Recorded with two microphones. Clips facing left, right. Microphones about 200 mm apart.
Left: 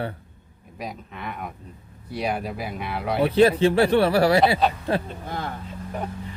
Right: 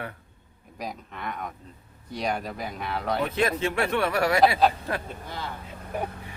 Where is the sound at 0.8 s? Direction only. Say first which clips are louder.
Left 1 dB; centre (ahead or behind).